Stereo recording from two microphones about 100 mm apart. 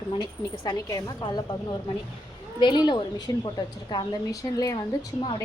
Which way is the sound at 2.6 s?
50° left (ahead or behind).